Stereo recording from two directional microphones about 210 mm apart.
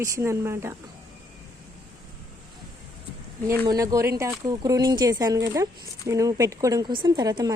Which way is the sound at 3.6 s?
15° right (ahead or behind).